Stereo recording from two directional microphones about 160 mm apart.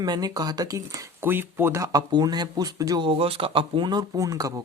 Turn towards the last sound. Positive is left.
turn(degrees=-20)  # may be behind; listen again after turning